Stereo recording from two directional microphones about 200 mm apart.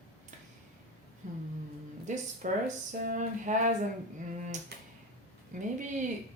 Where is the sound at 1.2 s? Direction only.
40° right (ahead or behind).